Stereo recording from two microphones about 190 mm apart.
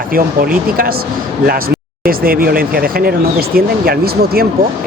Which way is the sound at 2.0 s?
50° right (ahead or behind).